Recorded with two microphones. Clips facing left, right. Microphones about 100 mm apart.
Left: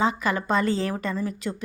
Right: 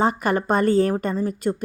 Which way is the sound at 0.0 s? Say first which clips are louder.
Right 4 dB; 50° right (ahead or behind).